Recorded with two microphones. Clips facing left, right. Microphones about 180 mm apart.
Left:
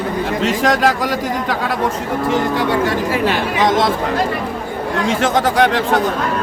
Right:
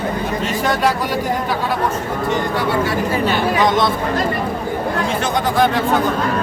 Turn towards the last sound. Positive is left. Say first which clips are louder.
# left 2 dB
turn(degrees=90)